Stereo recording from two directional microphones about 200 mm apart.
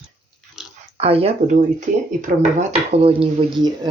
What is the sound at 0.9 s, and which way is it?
Speech, 30° right (ahead or behind).